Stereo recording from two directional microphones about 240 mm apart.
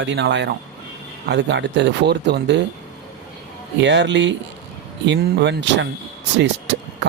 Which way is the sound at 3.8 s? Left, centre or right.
Right.